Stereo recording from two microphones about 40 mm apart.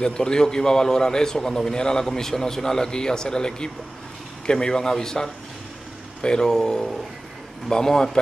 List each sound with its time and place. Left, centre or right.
0.0 s a man's voice: centre